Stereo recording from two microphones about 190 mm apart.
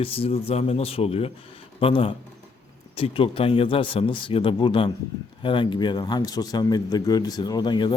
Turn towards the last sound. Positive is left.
turn(degrees=25)  # may be behind; listen again after turning